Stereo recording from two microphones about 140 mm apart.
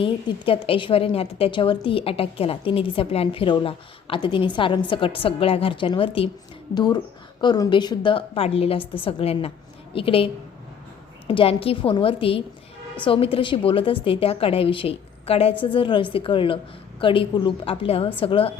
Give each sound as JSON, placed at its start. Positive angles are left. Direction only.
{"t": 0.0, "sound": "a woman's voice", "side_deg": 40}
{"t": 11.3, "sound": "a woman's voice", "side_deg": 40}